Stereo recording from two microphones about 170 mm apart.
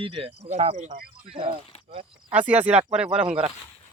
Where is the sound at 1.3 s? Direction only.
30° right (ahead or behind).